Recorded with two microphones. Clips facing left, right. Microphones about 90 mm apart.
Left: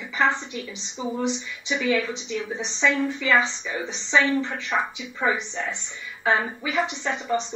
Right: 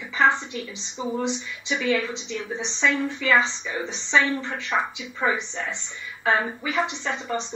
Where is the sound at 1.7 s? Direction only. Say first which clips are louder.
Even; 5° left (ahead or behind).